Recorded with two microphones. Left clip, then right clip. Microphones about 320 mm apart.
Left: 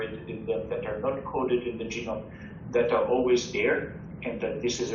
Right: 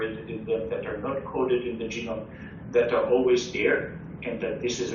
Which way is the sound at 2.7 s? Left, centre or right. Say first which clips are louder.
Right 2 dB; centre.